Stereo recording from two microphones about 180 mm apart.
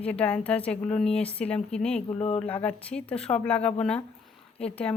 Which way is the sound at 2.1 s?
35° left (ahead or behind).